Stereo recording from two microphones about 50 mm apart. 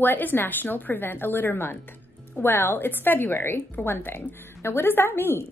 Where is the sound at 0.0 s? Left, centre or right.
Left.